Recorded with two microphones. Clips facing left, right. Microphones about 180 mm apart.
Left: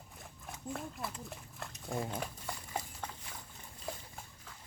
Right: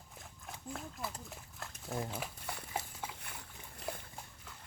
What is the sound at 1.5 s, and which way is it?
Dog, centre (ahead or behind).